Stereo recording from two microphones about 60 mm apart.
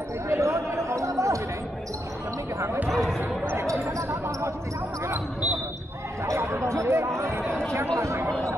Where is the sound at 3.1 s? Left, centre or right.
Right.